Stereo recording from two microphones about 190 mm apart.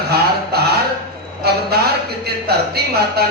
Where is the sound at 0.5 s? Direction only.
55° right (ahead or behind).